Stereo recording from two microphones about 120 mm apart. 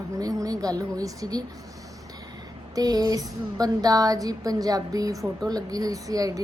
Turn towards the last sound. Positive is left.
turn(degrees=-30)  # may be behind; listen again after turning